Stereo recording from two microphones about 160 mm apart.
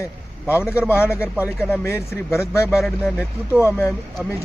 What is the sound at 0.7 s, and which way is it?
Speech, 10° right (ahead or behind).